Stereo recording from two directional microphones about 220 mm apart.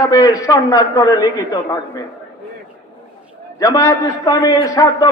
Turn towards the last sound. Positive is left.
turn(degrees=15)  # may be behind; listen again after turning